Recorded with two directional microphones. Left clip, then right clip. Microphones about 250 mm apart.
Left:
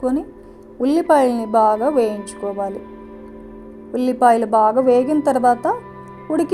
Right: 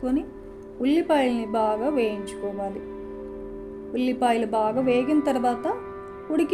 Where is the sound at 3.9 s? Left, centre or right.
Left.